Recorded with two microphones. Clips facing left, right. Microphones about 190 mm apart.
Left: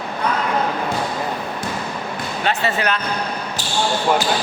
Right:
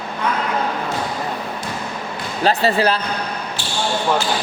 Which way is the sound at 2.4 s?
35° right (ahead or behind).